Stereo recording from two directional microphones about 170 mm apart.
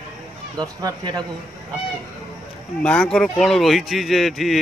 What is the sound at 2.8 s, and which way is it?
Speech, 5° left (ahead or behind).